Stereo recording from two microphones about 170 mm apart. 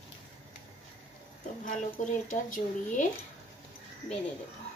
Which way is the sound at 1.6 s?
50° left (ahead or behind).